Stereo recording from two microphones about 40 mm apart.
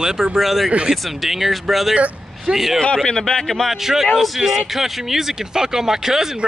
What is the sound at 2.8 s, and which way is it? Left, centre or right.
Speech, centre.